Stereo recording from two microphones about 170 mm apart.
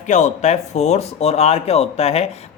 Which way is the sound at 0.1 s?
45° left (ahead or behind).